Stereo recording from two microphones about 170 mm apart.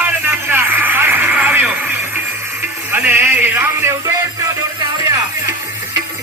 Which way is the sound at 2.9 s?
10° right (ahead or behind).